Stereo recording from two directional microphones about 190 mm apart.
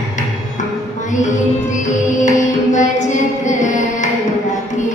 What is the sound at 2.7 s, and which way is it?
Music, 40° left (ahead or behind).